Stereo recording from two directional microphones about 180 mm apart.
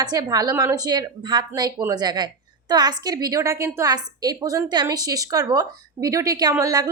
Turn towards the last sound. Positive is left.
turn(degrees=-20)  # may be behind; listen again after turning